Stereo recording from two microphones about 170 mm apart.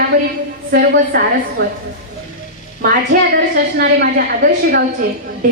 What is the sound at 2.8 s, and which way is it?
A woman's voice, 60° right (ahead or behind).